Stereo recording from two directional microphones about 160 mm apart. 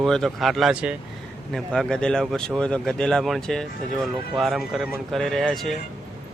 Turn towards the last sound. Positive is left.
turn(degrees=0)  # may be behind; listen again after turning